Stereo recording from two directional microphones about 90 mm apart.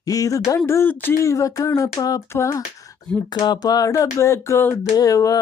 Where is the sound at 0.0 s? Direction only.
40° left (ahead or behind); by 1.1 s 25° left (ahead or behind).